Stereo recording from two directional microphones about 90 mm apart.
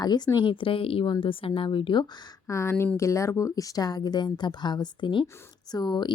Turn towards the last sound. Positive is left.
turn(degrees=55)  # may be behind; listen again after turning